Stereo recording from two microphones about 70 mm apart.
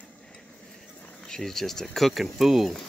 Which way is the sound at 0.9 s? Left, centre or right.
Left.